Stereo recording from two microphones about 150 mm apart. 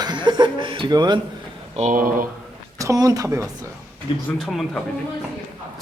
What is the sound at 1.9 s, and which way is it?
Speech, 65° right (ahead or behind).